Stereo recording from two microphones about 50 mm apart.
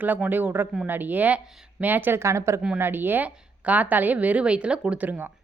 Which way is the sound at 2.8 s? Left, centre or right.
Right.